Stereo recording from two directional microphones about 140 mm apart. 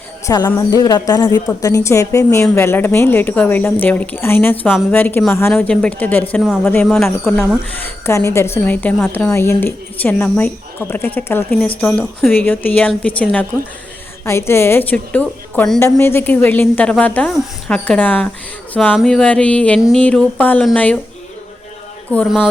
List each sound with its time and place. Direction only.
0.3 s a woman's voice: 25° left (ahead or behind)
5.5 s speech: 5° left (ahead or behind)
7.8 s speech: 15° left (ahead or behind)
9.3 s speech: 20° left (ahead or behind)
11.9 s speech: centre (ahead or behind)
12.3 s speech: 15° left (ahead or behind)